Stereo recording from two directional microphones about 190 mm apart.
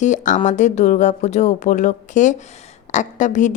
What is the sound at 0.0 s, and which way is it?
A woman's voice, 40° left (ahead or behind).